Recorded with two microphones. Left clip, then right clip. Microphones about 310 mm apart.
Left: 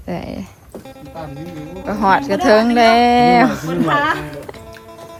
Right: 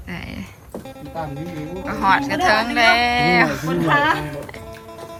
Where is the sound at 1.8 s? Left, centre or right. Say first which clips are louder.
Left 3 dB; centre.